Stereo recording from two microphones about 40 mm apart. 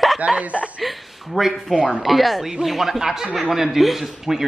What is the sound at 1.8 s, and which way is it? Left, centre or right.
Speech, left.